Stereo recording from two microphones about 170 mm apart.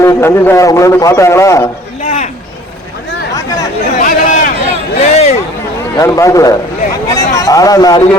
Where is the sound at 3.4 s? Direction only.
20° left (ahead or behind).